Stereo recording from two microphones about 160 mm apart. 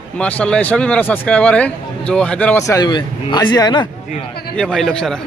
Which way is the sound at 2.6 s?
25° left (ahead or behind).